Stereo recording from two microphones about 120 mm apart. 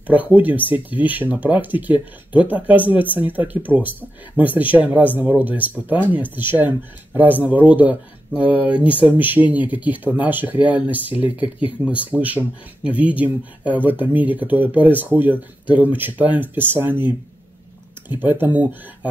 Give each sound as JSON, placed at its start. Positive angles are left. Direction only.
{"t": 0.0, "sound": "speech", "side_deg": -15}
{"t": 9.0, "sound": "speech", "side_deg": -15}